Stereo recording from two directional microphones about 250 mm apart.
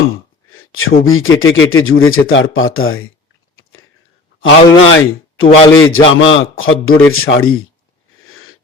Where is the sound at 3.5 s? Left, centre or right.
Left.